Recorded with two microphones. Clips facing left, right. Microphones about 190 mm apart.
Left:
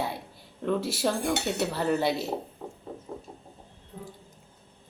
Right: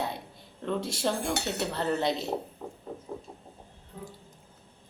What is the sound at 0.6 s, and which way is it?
Speech, 5° left (ahead or behind).